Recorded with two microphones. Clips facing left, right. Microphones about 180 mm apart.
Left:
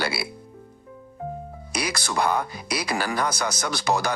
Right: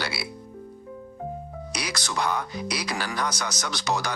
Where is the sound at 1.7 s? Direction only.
50° left (ahead or behind).